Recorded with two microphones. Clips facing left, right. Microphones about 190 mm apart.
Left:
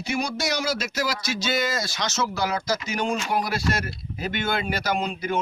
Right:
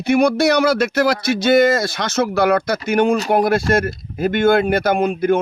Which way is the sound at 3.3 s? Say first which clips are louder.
Right 10 dB; 55° right (ahead or behind).